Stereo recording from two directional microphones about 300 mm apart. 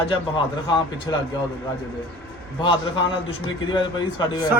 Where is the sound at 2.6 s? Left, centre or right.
Centre.